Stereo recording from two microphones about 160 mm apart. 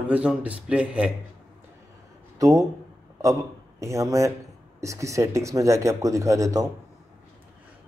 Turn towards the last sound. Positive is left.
turn(degrees=-20)  # may be behind; listen again after turning